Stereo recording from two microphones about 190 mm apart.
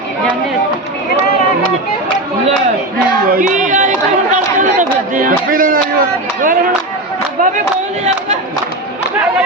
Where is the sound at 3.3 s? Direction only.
45° right (ahead or behind).